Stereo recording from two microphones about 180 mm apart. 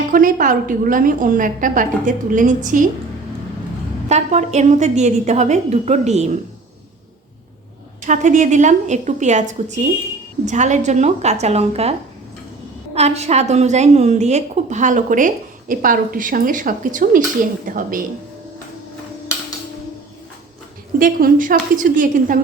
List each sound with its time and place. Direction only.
0.1 s a woman's voice: 50° right (ahead or behind)
4.1 s a woman's voice: 40° right (ahead or behind)
8.0 s a woman's voice: 45° right (ahead or behind)
21.0 s a woman's voice: 50° right (ahead or behind)